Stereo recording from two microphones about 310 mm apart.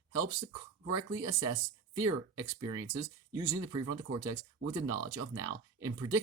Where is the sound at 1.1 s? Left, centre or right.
Centre.